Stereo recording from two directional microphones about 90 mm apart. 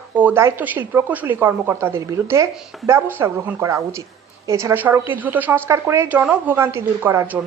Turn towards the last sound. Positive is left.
turn(degrees=-30)  # may be behind; listen again after turning